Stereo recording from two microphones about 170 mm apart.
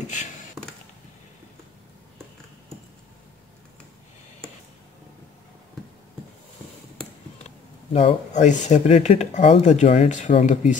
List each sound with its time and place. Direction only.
7.4 s speech: 40° left (ahead or behind)